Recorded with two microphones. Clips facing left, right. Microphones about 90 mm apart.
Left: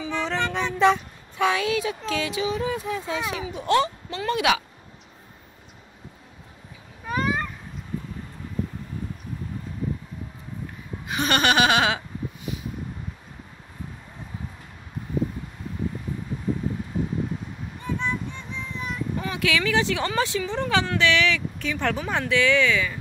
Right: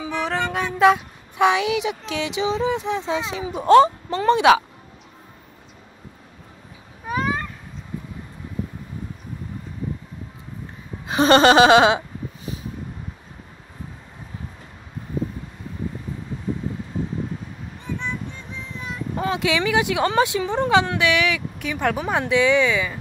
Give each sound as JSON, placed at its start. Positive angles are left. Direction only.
{"t": 0.0, "sound": "music", "side_deg": -10}
{"t": 1.4, "sound": "speech", "side_deg": -20}
{"t": 3.5, "sound": "speech", "side_deg": -35}
{"t": 11.1, "sound": "speech", "side_deg": -30}
{"t": 19.1, "sound": "speech", "side_deg": -25}